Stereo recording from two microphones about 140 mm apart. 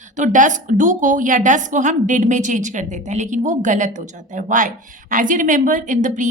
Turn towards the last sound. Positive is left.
turn(degrees=-65)  # may be behind; listen again after turning